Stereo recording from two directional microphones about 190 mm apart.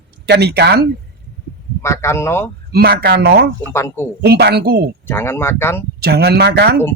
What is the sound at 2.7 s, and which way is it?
Speech, 55° right (ahead or behind).